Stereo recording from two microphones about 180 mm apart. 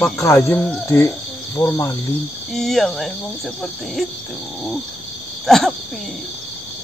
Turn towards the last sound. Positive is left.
turn(degrees=0)  # may be behind; listen again after turning